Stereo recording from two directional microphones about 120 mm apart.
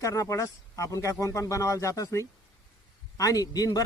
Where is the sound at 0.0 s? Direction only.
25° left (ahead or behind).